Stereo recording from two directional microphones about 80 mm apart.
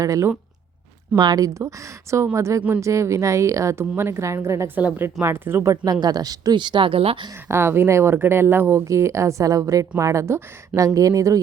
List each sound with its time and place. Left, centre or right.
0.0 s a woman's voice: right
1.1 s speech: right
1.5 s a woman's voice: right
5.7 s speech: right
6.6 s speech: right
7.4 s a woman's voice: right
8.8 s a woman's voice: right